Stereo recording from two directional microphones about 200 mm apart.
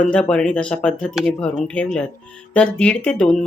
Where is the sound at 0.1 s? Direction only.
5° left (ahead or behind).